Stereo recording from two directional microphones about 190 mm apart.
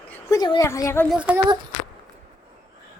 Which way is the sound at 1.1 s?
5° right (ahead or behind).